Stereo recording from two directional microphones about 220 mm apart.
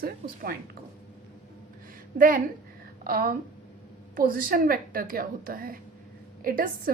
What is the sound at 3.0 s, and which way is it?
A woman's voice, 40° right (ahead or behind).